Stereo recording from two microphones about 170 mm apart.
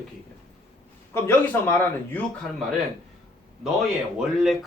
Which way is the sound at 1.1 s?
15° left (ahead or behind).